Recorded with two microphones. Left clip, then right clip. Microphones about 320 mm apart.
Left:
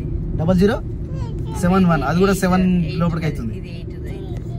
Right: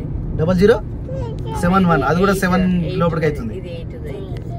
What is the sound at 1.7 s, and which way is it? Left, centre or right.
Speech, centre.